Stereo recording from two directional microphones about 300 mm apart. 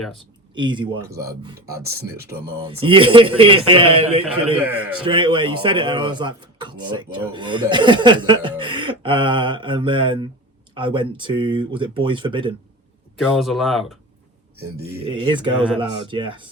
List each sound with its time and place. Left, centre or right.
0.0 s speech: centre
0.5 s speech: centre
4.5 s speech: centre
5.0 s speech: centre
13.1 s speech: centre
15.0 s speech: centre